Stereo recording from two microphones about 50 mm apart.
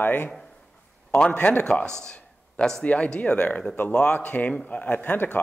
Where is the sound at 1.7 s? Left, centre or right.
Centre.